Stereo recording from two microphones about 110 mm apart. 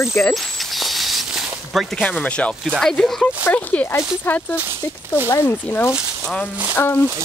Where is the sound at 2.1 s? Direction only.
10° left (ahead or behind).